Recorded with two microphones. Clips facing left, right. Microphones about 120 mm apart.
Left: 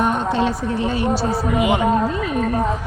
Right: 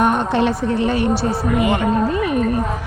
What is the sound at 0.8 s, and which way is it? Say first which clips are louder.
Speech: right 1 dB; 65° right (ahead or behind).